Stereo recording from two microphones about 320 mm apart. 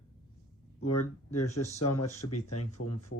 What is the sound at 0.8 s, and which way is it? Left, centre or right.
Speech, left.